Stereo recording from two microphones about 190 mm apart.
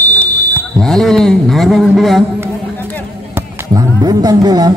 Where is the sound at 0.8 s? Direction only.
Centre (ahead or behind).